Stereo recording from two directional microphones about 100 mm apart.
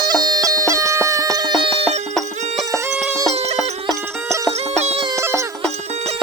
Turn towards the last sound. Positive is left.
turn(degrees=-30)  # may be behind; listen again after turning